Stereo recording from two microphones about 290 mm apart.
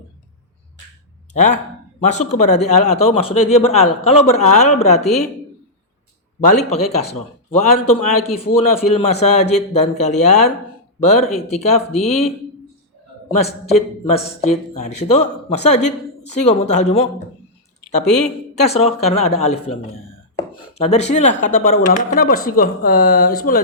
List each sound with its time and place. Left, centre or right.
1.3 s speech: left
6.4 s speech: left
13.3 s speech: left
18.7 s speech: left